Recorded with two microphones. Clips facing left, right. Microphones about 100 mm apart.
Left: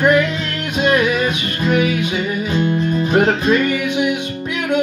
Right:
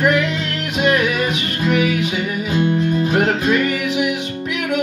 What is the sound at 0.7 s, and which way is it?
Music, 30° left (ahead or behind).